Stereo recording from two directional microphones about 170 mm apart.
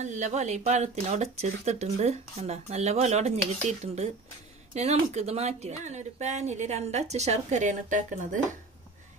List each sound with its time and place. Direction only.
0.0 s speech: 45° right (ahead or behind)